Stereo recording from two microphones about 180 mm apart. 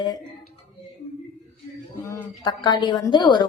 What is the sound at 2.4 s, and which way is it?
Speech, 25° left (ahead or behind).